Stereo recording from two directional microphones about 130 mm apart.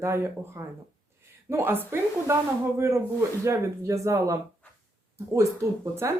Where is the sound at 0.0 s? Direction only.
20° right (ahead or behind).